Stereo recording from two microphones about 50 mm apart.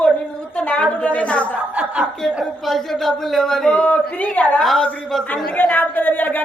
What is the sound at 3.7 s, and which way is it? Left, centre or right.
Speech, left.